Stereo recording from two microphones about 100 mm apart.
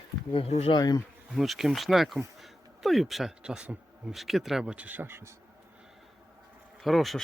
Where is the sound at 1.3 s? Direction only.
5° right (ahead or behind); by 5.3 s 25° right (ahead or behind).